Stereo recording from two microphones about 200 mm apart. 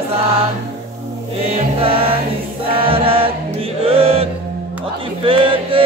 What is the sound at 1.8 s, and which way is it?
Music, 30° right (ahead or behind).